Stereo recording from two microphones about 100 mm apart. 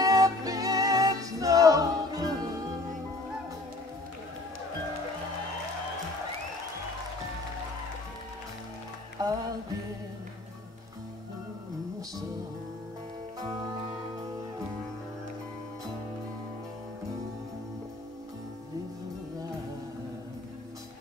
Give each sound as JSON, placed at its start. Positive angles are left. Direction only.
{"t": 0.0, "sound": "music", "side_deg": -35}
{"t": 9.2, "sound": "music", "side_deg": -40}